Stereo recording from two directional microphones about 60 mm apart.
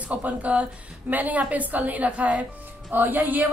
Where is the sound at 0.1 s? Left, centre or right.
Right.